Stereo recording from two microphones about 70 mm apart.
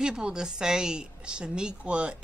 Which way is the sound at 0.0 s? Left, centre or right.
Centre.